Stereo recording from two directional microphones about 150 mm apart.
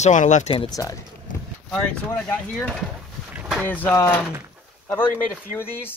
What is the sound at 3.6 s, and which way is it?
Speech, 10° left (ahead or behind).